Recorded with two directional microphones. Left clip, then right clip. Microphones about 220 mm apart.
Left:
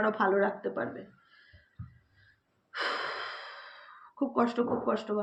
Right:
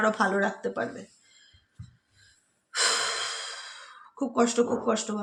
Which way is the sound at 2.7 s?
45° right (ahead or behind).